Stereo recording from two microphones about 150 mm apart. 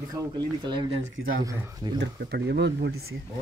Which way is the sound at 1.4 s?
20° right (ahead or behind).